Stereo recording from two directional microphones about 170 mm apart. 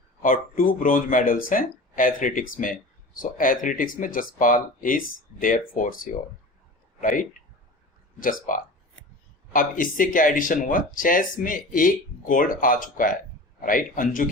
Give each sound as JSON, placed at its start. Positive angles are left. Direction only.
{"t": 0.2, "sound": "speech", "side_deg": 55}